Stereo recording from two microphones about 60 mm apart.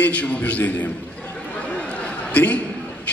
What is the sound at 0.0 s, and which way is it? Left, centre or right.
Speech, left.